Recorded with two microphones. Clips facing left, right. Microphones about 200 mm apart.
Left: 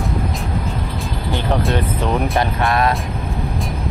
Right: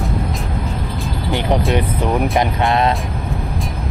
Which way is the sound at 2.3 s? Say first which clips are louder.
Right 2 dB; 15° right (ahead or behind).